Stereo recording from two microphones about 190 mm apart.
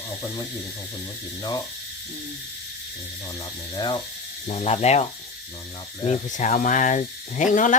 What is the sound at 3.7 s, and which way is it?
Speech, 25° left (ahead or behind).